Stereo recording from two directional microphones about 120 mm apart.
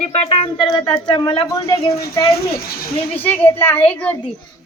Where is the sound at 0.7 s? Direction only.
35° left (ahead or behind).